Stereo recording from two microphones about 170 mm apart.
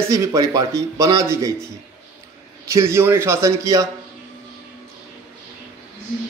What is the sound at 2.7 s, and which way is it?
Speech, 15° right (ahead or behind).